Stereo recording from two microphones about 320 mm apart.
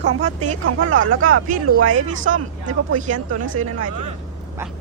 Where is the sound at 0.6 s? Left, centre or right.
Right.